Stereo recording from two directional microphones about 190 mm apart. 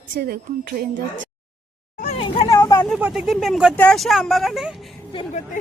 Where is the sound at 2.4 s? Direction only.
15° left (ahead or behind).